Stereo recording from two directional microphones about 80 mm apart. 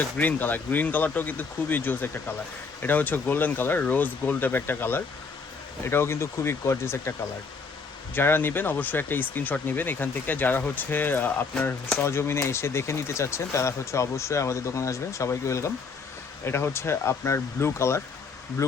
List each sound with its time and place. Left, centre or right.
0.0 s speech: left
8.1 s speech: left